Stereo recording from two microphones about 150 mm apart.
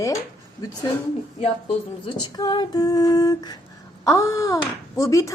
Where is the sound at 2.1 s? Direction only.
30° left (ahead or behind).